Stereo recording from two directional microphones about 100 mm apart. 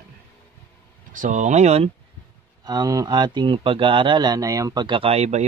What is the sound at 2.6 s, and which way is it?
Speech, 40° right (ahead or behind).